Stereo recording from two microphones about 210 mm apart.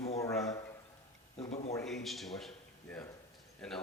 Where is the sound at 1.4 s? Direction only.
30° left (ahead or behind).